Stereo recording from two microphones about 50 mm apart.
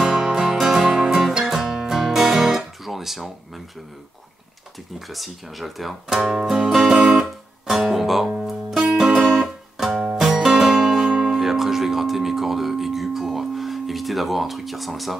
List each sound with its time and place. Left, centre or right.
0.0 s music: centre
1.3 s guitar: centre
4.9 s speech: centre
7.2 s music: centre